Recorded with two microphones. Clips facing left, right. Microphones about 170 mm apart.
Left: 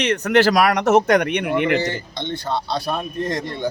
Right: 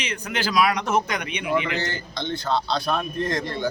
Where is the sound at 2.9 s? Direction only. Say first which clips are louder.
Left 1 dB; 15° left (ahead or behind).